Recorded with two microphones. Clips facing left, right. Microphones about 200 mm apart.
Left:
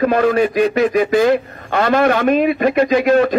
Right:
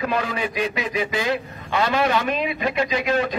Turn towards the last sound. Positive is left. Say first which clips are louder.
# left 9 dB
turn(degrees=50)  # may be behind; listen again after turning